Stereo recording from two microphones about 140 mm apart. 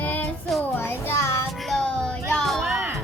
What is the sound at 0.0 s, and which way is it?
Child singing, 10° left (ahead or behind).